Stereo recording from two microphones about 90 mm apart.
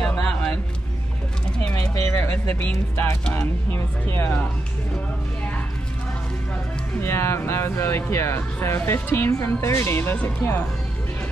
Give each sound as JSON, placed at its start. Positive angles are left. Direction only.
{"t": 0.0, "sound": "a sound", "side_deg": 10}
{"t": 1.6, "sound": "pigeon", "side_deg": 10}
{"t": 2.0, "sound": "speech", "side_deg": 30}
{"t": 4.2, "sound": "speech", "side_deg": 25}
{"t": 7.0, "sound": "speech", "side_deg": 30}